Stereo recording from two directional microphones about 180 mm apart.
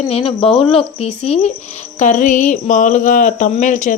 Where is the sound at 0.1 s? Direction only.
30° left (ahead or behind).